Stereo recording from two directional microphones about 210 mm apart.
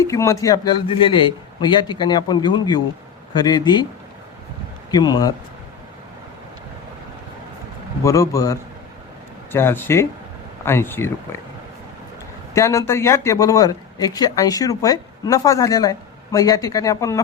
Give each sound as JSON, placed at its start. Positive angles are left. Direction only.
{"t": 0.0, "sound": "a man's voice", "side_deg": 15}
{"t": 4.9, "sound": "a man's voice", "side_deg": 20}
{"t": 8.0, "sound": "speech", "side_deg": 15}
{"t": 12.5, "sound": "speech", "side_deg": 15}